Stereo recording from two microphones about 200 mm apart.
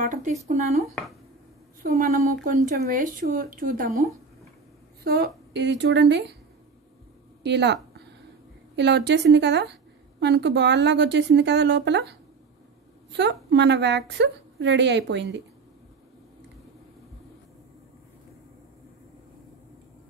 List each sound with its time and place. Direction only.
0.0 s a woman's voice: 40° right (ahead or behind); by 6.3 s 60° right (ahead or behind)
7.4 s speech: 60° right (ahead or behind)